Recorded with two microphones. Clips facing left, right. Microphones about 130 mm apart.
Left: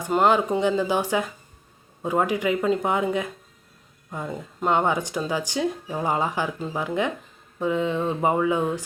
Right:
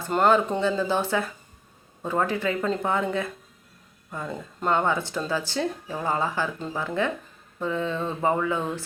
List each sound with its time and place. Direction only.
0.0 s speech: 10° left (ahead or behind)